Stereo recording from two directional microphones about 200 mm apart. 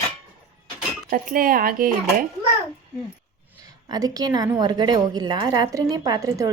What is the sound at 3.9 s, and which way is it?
A woman's voice, 20° right (ahead or behind).